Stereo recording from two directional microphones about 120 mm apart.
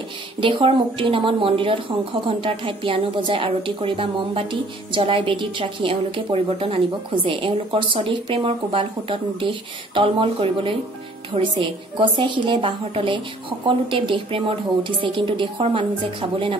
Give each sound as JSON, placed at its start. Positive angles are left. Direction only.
{"t": 0.4, "sound": "a woman's voice", "side_deg": -45}